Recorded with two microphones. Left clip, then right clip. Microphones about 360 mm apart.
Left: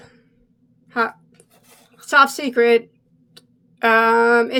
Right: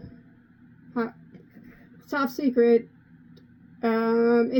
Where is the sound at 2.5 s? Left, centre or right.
Left.